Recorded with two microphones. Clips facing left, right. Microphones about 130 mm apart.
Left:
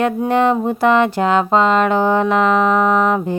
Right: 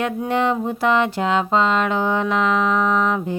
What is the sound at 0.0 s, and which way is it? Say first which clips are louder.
Music: left 5 dB; 50° left (ahead or behind).